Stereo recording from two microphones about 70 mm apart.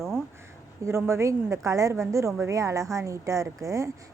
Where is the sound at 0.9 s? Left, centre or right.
Right.